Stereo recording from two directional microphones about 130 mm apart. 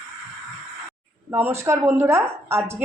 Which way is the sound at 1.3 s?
20° right (ahead or behind).